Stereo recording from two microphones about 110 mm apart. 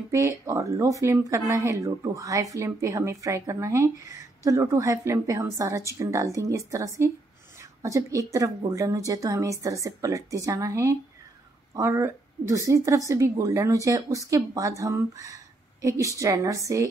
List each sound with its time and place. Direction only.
0.1 s a woman's voice: 30° right (ahead or behind)